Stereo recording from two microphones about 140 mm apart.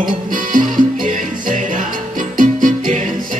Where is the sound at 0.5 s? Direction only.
70° right (ahead or behind).